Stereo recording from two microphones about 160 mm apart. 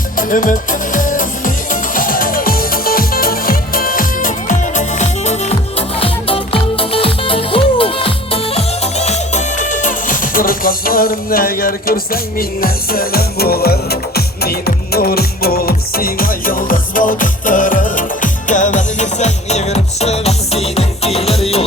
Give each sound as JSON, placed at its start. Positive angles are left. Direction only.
{"t": 0.2, "sound": "music", "side_deg": 60}